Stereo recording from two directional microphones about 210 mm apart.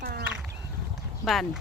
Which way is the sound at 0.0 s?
45° right (ahead or behind).